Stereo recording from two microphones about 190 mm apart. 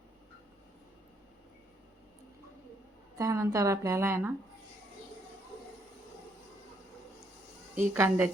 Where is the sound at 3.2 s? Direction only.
15° right (ahead or behind).